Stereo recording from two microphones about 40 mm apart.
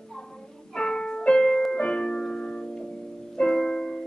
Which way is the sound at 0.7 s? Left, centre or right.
Centre.